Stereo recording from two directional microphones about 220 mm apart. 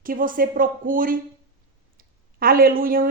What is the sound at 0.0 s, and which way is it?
A woman's voice, 40° right (ahead or behind).